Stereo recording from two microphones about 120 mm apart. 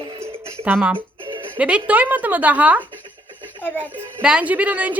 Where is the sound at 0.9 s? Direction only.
45° right (ahead or behind).